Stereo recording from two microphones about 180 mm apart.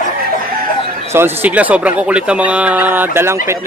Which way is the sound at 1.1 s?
10° right (ahead or behind).